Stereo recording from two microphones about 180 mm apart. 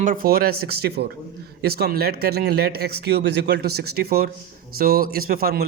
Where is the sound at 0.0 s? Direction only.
50° right (ahead or behind).